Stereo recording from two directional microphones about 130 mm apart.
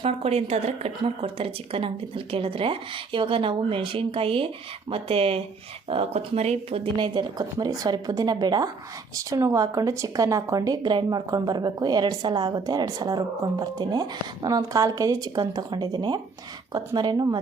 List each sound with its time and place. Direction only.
0.0 s speech: 50° right (ahead or behind); by 17.2 s 30° right (ahead or behind)